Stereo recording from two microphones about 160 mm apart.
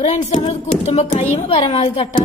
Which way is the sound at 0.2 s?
40° left (ahead or behind).